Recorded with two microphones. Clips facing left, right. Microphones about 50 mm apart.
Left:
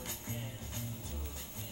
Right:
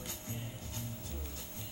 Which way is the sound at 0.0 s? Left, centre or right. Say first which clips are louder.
Left 1 dB; left.